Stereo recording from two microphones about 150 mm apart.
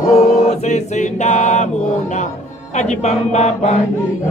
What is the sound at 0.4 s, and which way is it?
Chant, 50° left (ahead or behind).